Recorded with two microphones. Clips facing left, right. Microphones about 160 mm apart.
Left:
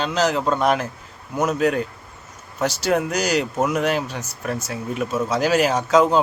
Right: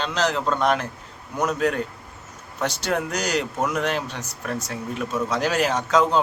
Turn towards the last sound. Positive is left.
turn(degrees=10)  # may be behind; listen again after turning